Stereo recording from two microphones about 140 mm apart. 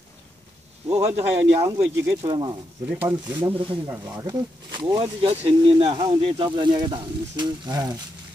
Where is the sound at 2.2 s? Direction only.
30° right (ahead or behind).